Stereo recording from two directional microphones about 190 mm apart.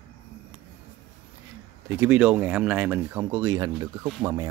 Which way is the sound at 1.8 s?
10° right (ahead or behind).